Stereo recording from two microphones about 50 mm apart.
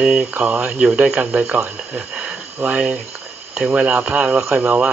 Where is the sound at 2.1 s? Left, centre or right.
Right.